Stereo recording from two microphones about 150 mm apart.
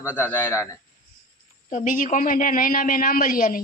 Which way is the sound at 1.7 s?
60° left (ahead or behind).